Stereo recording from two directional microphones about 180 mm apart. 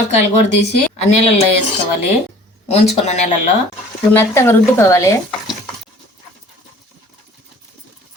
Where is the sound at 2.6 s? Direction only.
35° left (ahead or behind).